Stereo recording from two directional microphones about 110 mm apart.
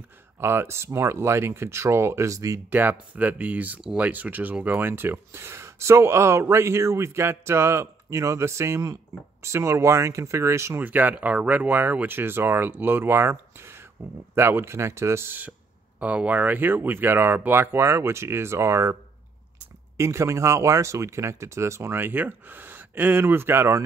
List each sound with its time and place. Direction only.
0.4 s speech: 25° right (ahead or behind)
2.7 s speech: 15° right (ahead or behind)
20.0 s speech: 25° right (ahead or behind)